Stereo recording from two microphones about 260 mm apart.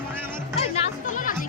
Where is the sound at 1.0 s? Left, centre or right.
Left.